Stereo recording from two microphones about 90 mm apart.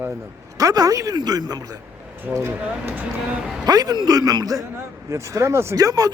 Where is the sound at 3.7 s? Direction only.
45° right (ahead or behind); by 5.7 s 30° right (ahead or behind).